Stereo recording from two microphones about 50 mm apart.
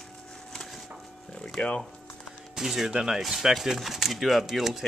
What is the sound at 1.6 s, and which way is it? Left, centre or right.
Speech, left.